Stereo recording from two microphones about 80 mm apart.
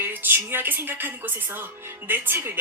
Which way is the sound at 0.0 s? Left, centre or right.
Right.